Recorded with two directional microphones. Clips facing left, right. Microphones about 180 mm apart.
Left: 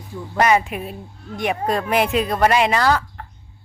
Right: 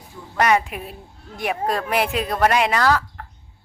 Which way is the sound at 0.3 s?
5° left (ahead or behind).